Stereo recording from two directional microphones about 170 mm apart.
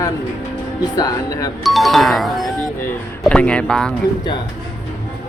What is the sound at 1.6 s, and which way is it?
Speech, centre (ahead or behind).